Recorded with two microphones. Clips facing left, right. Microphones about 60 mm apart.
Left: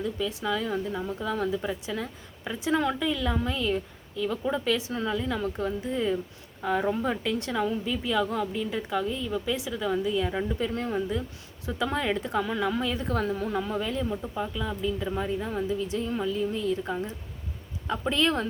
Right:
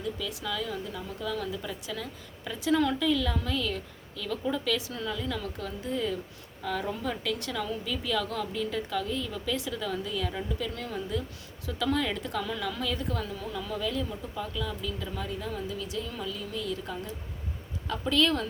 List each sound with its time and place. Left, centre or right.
0.0 s a woman's voice: left
13.1 s a woman's voice: left